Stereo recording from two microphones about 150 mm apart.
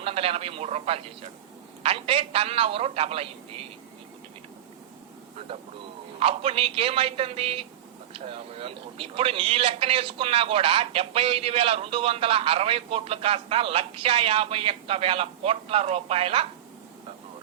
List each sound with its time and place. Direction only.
0.0 s a man's voice: 40° right (ahead or behind)
6.1 s a man's voice: 40° right (ahead or behind)